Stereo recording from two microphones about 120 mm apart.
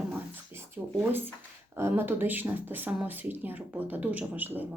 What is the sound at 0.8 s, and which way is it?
Speech, 15° right (ahead or behind).